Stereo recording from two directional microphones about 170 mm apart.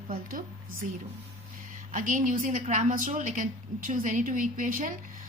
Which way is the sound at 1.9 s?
50° right (ahead or behind).